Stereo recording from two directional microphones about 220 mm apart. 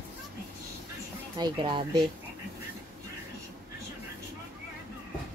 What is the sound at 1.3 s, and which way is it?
Speech, 20° right (ahead or behind).